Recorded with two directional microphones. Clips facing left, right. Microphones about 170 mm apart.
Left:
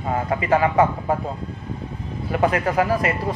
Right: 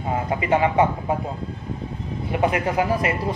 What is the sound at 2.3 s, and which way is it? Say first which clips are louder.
Speech: left 2 dB; 20° right (ahead or behind).